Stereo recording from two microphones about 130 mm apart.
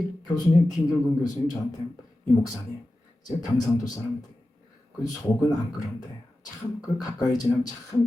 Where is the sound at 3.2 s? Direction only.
30° left (ahead or behind).